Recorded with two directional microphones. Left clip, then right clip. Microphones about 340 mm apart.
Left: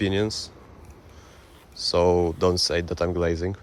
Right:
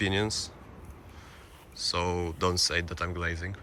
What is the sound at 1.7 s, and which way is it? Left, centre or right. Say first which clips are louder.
Speech: left 10 dB; centre.